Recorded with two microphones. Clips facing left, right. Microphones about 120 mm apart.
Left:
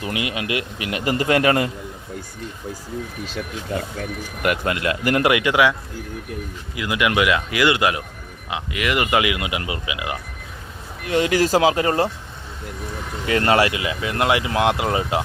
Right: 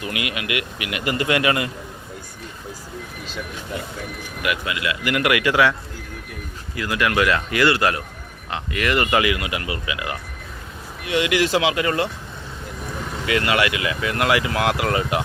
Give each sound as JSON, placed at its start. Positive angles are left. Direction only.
{"t": 0.0, "sound": "a man's voice", "side_deg": 30}
{"t": 4.4, "sound": "speech", "side_deg": 45}
{"t": 5.2, "sound": "speech", "side_deg": 20}
{"t": 6.7, "sound": "speech", "side_deg": 15}
{"t": 11.0, "sound": "a man's voice", "side_deg": 40}
{"t": 13.2, "sound": "speech", "side_deg": 35}